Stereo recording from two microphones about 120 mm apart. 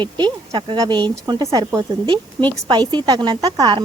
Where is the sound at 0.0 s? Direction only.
40° right (ahead or behind).